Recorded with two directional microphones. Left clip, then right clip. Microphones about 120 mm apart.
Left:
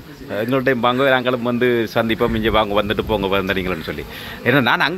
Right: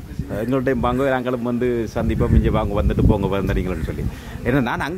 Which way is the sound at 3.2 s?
30° right (ahead or behind).